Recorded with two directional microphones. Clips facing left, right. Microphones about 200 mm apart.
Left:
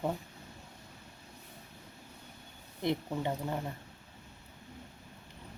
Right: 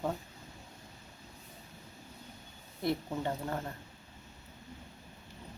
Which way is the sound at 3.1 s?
10° left (ahead or behind).